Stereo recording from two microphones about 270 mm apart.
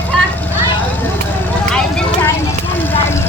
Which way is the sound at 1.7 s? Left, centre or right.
Centre.